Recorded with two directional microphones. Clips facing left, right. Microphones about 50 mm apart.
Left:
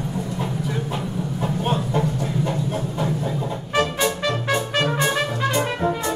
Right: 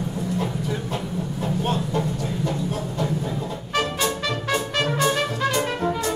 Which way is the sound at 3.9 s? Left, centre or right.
Centre.